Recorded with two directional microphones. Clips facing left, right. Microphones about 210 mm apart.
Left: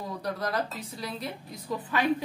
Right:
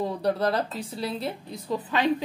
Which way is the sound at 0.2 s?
30° right (ahead or behind).